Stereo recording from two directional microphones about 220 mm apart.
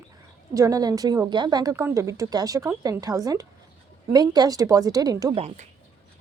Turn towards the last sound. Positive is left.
turn(degrees=-15)  # may be behind; listen again after turning